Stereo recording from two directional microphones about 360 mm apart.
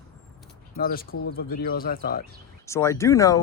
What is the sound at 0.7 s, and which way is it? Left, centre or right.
Speech, left.